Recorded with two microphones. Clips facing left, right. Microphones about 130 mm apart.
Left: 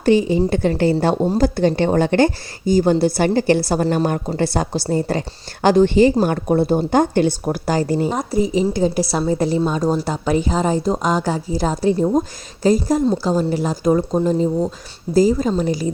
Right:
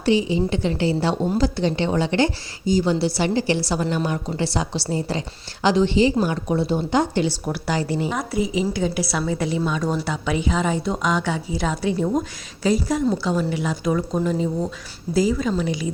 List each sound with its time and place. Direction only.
0.0 s a woman's voice: 50° left (ahead or behind)